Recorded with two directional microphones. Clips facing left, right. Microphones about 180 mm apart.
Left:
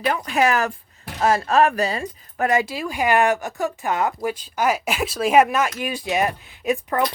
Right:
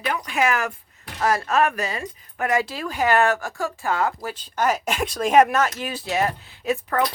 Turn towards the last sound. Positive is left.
turn(degrees=15)  # may be behind; listen again after turning